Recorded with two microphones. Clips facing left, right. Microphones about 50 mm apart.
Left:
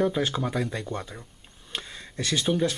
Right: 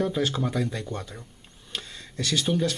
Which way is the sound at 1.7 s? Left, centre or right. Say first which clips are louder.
Left 1 dB; centre.